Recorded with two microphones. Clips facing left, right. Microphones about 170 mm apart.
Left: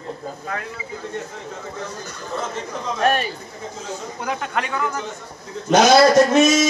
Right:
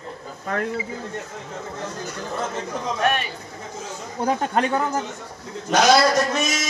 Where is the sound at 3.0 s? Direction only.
35° left (ahead or behind).